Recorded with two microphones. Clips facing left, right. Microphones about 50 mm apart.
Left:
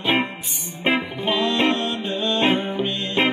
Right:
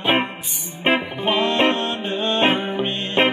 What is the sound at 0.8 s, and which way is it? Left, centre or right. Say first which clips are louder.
Music: right 2 dB; right.